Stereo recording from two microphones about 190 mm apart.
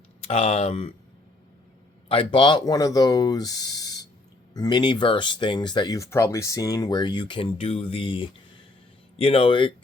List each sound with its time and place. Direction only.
0.2 s speech: 35° left (ahead or behind)
2.0 s speech: 30° left (ahead or behind)